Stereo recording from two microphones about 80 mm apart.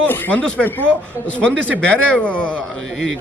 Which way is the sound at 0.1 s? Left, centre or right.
Centre.